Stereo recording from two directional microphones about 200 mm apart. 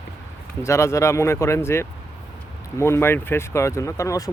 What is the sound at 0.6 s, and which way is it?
Speech, 15° left (ahead or behind).